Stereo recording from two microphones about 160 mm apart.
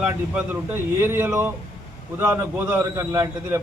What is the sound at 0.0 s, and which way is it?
A man's voice, 10° right (ahead or behind).